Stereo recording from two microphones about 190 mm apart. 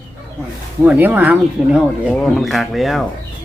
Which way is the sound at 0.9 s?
10° right (ahead or behind).